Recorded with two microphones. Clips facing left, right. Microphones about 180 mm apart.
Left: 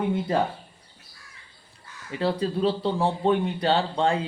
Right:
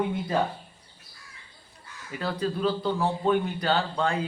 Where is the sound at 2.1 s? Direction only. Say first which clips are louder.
Left 4 dB; 30° left (ahead or behind).